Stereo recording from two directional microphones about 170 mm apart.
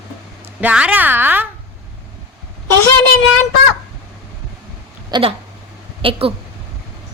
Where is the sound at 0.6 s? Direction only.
10° right (ahead or behind).